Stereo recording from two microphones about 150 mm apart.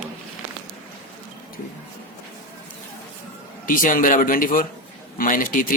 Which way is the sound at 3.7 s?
65° left (ahead or behind).